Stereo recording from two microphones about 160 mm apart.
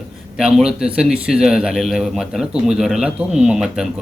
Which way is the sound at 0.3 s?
5° right (ahead or behind).